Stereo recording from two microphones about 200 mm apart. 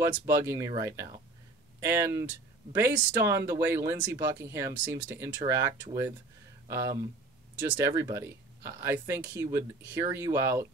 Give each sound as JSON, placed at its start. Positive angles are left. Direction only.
{"t": 0.0, "sound": "speech", "side_deg": -15}